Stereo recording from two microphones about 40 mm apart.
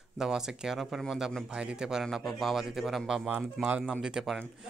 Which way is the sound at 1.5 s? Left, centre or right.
Right.